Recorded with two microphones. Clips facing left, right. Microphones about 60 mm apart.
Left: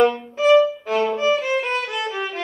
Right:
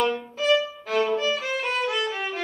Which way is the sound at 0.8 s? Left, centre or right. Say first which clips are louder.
Left 4 dB; left.